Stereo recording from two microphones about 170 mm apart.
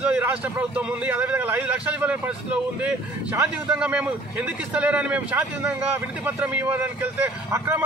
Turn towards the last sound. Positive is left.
turn(degrees=-15)  # may be behind; listen again after turning